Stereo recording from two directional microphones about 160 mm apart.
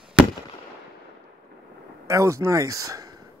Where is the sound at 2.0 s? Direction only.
20° right (ahead or behind).